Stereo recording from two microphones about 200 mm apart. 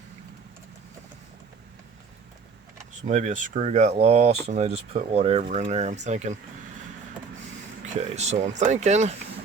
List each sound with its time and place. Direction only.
3.1 s speech: 40° right (ahead or behind)
7.9 s speech: 35° right (ahead or behind)